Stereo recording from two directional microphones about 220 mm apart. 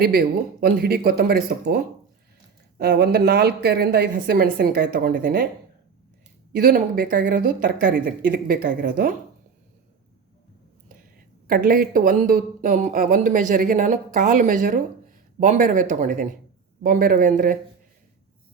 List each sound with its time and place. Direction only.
0.0 s a woman's voice: 45° right (ahead or behind)
6.6 s speech: 40° right (ahead or behind)
11.4 s speech: 40° right (ahead or behind)